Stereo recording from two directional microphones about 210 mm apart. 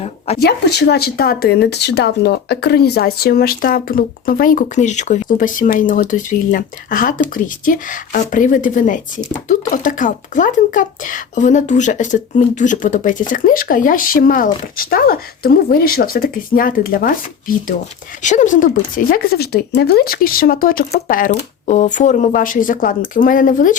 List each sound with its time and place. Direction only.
0.3 s speech: 50° left (ahead or behind)